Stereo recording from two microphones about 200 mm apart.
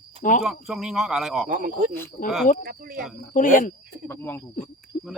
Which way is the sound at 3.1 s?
45° left (ahead or behind).